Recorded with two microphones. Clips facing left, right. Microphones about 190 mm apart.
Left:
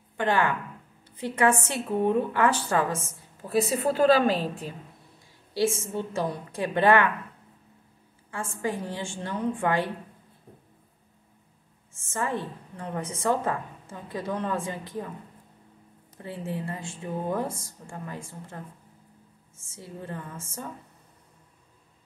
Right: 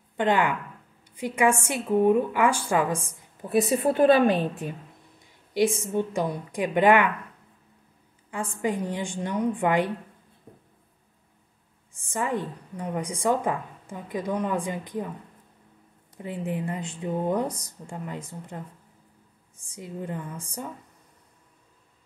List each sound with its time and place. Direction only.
0.2 s a woman's voice: 15° right (ahead or behind)
5.5 s a woman's voice: 15° right (ahead or behind)
8.3 s a woman's voice: 15° right (ahead or behind)
11.9 s a woman's voice: 15° right (ahead or behind)
16.2 s speech: 15° right (ahead or behind)
19.6 s a woman's voice: 15° right (ahead or behind)